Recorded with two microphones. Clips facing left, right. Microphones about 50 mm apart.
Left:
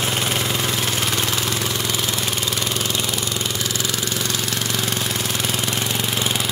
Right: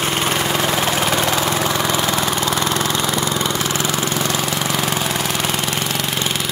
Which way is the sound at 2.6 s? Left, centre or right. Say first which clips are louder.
Right 5 dB; right.